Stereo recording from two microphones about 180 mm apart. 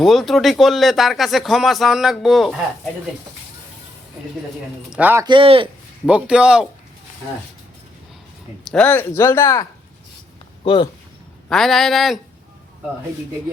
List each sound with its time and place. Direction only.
0.0 s speech: centre (ahead or behind)
4.9 s a man's voice: 10° right (ahead or behind)
5.2 s speech: 30° right (ahead or behind)
6.1 s speech: 5° right (ahead or behind)
8.7 s speech: 10° left (ahead or behind)
10.6 s speech: 30° left (ahead or behind)
11.4 s speech: centre (ahead or behind)